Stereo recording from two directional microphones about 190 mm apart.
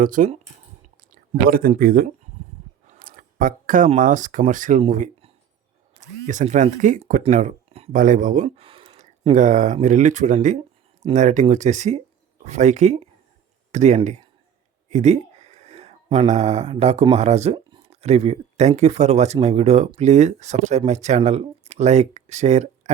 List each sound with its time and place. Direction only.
0.0 s speech: 45° right (ahead or behind)